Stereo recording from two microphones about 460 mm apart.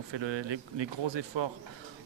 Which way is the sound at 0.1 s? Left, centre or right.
Right.